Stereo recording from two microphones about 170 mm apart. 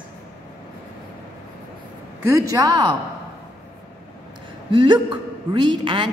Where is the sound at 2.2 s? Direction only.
20° right (ahead or behind).